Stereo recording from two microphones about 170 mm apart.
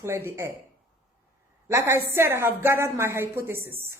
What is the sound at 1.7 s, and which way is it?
A woman's voice, 15° right (ahead or behind).